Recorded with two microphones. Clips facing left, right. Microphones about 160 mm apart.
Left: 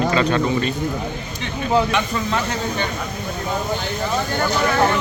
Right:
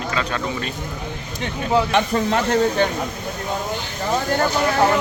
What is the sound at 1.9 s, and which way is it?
Speech, 55° right (ahead or behind).